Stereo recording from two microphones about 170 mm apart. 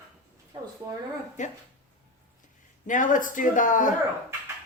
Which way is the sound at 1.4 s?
45° left (ahead or behind).